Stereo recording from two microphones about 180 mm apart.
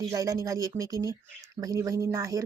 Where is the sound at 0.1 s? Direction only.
15° right (ahead or behind).